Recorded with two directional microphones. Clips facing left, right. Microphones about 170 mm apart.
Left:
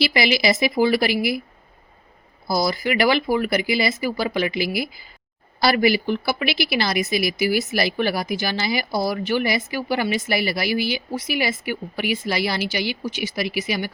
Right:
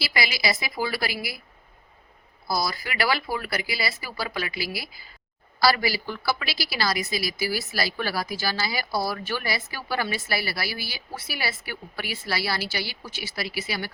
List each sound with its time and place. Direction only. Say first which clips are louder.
0.0 s a woman's voice: left 8 dB; 25° left (ahead or behind)
2.5 s a woman's voice: left 7 dB; 20° left (ahead or behind)